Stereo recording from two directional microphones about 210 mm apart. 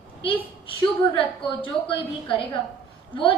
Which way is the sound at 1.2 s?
25° left (ahead or behind).